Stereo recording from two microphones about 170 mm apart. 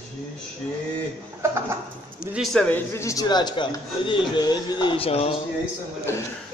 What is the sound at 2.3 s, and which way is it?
Speech, centre (ahead or behind).